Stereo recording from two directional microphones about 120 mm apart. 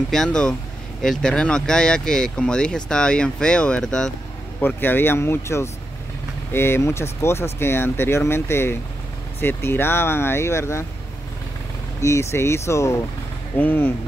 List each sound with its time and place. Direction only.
0.1 s speech: 5° left (ahead or behind)
4.6 s speech: 15° left (ahead or behind)
12.0 s speech: 25° left (ahead or behind)